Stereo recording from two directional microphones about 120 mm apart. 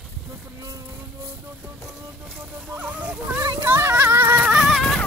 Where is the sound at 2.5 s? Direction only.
15° right (ahead or behind).